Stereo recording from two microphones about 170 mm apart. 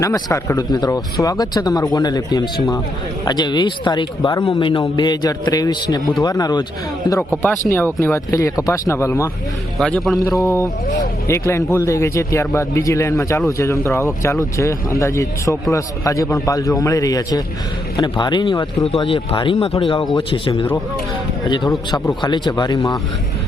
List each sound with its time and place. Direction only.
0.0 s a man's voice: 20° left (ahead or behind)
7.7 s a man's voice: 15° left (ahead or behind)
9.7 s a man's voice: 5° left (ahead or behind)
11.3 s a man's voice: 15° left (ahead or behind)